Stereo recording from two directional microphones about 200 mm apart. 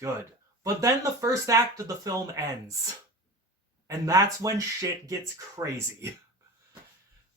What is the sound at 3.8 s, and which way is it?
Speech, 15° right (ahead or behind).